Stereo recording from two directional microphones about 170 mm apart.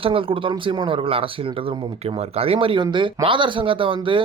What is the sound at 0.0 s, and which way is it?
Speech, 30° right (ahead or behind).